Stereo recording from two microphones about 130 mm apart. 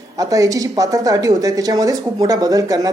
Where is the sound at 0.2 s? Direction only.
25° right (ahead or behind).